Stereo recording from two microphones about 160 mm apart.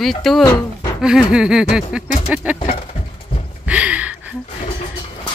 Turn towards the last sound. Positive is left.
turn(degrees=-10)  # may be behind; listen again after turning